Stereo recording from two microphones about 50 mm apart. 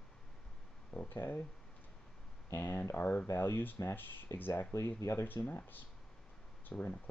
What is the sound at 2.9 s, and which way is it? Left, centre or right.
Speech, left.